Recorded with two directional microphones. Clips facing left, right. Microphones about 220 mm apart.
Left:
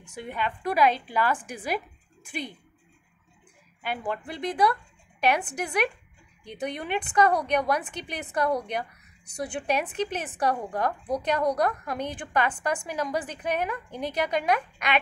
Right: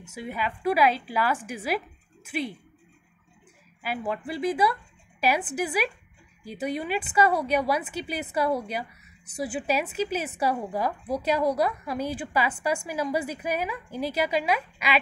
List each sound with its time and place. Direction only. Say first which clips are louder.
0.0 s a woman's voice: even; 5° right (ahead or behind)
3.8 s a woman's voice: right 1 dB; 5° right (ahead or behind)